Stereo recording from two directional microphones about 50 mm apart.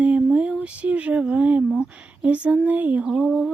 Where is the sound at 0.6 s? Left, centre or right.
Right.